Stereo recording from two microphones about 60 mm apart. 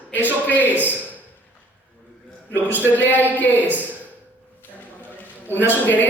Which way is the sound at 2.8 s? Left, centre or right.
Left.